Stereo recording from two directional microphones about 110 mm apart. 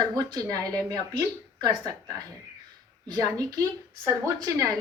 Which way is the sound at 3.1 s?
35° right (ahead or behind).